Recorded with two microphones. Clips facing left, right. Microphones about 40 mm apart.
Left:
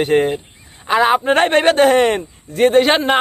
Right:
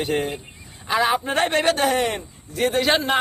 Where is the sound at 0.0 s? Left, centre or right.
Left.